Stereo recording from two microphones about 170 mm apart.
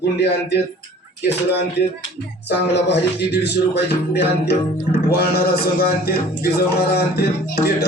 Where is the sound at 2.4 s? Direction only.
85° left.